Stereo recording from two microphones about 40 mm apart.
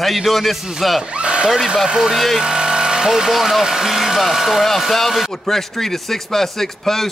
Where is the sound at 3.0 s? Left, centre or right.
Centre.